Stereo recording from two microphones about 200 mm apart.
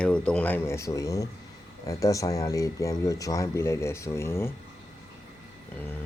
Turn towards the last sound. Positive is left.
turn(degrees=10)  # may be behind; listen again after turning